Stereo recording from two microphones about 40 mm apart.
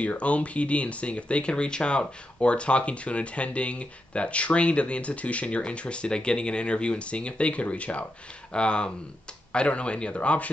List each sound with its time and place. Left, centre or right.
0.0 s speech: left